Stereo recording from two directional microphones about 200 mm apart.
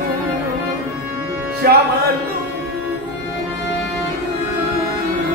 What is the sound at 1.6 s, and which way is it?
Music, 50° right (ahead or behind).